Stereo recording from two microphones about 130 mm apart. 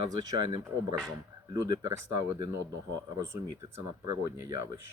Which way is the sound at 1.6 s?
30° right (ahead or behind).